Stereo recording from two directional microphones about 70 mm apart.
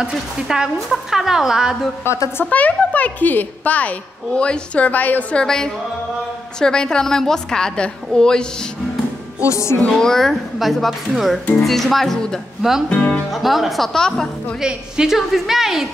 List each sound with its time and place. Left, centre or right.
0.0 s a woman's voice: centre
2.0 s a woman's voice: left
2.5 s a child's voice: left
5.4 s a woman's voice: centre
9.5 s music: left
9.8 s speech: centre
12.9 s a woman's voice: centre
13.3 s speech: centre
14.6 s a woman's voice: centre